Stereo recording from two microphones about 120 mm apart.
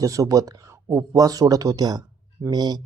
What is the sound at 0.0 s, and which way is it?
Speech, 30° right (ahead or behind).